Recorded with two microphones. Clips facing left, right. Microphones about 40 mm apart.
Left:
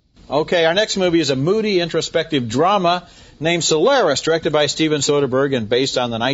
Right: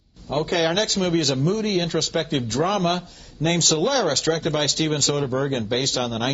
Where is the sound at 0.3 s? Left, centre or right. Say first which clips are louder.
Left 6 dB; left.